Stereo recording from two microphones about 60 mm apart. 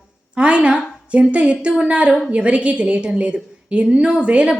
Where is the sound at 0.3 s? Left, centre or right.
Centre.